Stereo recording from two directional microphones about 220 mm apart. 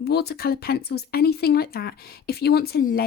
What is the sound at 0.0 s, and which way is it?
Speech, 45° left (ahead or behind).